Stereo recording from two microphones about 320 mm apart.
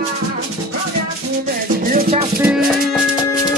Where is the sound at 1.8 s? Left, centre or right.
Right.